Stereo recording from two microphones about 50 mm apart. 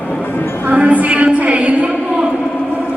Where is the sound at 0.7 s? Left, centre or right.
Right.